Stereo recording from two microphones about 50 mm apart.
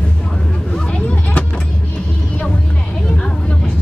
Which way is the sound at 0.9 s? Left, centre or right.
Left.